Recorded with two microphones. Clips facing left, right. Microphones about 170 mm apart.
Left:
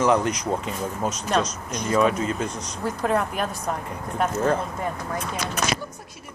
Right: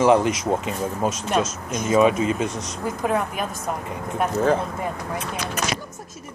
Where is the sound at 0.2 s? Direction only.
90° right.